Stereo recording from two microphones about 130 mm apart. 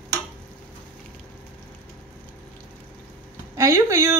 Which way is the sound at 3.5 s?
20° right (ahead or behind).